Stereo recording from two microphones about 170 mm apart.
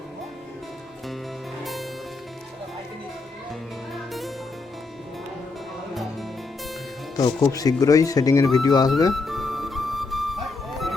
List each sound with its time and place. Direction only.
3.9 s music: centre (ahead or behind)
7.2 s speech: 20° left (ahead or behind)
9.1 s flute: centre (ahead or behind)